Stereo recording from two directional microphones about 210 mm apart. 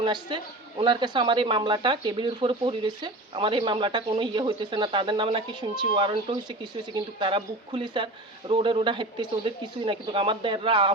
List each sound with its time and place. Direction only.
0.0 s speech: 20° right (ahead or behind)